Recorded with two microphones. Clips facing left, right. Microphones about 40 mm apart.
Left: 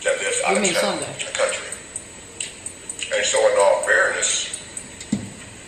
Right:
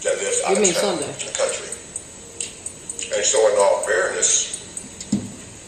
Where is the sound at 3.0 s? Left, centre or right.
Left.